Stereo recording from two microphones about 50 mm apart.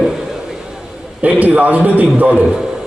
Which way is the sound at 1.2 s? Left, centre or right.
Right.